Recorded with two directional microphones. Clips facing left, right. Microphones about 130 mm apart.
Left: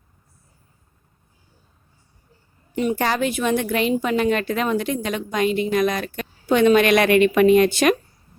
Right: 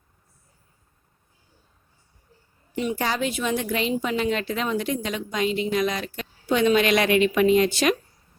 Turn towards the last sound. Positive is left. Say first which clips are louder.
# left 4 dB
turn(degrees=55)  # may be behind; listen again after turning